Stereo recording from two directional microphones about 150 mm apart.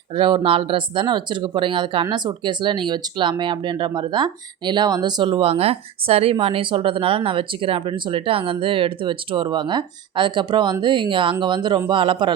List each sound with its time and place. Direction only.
0.1 s speech: 30° right (ahead or behind)